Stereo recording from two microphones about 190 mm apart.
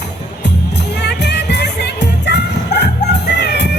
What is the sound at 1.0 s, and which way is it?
Music, 65° left (ahead or behind).